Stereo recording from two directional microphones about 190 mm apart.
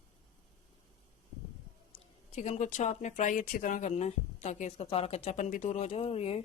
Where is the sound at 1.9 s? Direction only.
35° left (ahead or behind).